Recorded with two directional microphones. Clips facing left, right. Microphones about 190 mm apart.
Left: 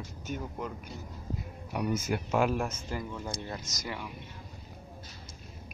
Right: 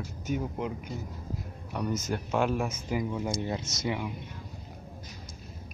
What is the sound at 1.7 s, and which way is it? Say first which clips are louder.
Speech: left 1 dB; 10° left (ahead or behind).